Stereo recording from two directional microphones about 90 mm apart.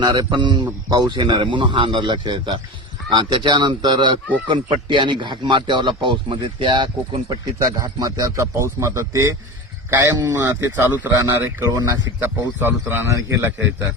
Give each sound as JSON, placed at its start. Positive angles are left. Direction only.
{"t": 0.0, "sound": "a man's voice", "side_deg": -60}
{"t": 7.6, "sound": "a man's voice", "side_deg": -40}
{"t": 12.2, "sound": "a man's voice", "side_deg": -25}